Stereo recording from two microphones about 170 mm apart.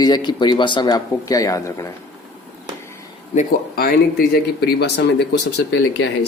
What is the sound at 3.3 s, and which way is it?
Speech, 50° left (ahead or behind).